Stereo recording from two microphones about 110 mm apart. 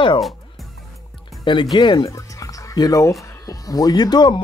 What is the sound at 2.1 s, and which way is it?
Speech, 30° left (ahead or behind).